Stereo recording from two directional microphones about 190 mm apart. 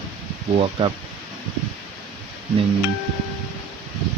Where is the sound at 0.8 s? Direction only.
25° right (ahead or behind).